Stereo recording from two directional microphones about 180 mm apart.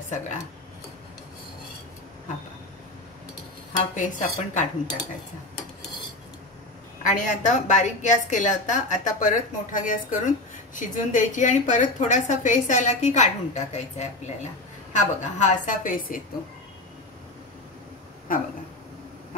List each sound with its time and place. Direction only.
3.9 s a woman's voice: 45° left (ahead or behind)
7.0 s a woman's voice: 45° left (ahead or behind)
18.3 s a sound: 50° left (ahead or behind)